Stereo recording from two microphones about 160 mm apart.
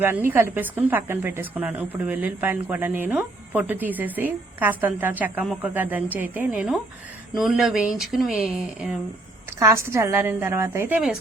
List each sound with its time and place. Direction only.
0.0 s a woman's voice: 15° right (ahead or behind)
9.6 s a woman's voice: 20° right (ahead or behind)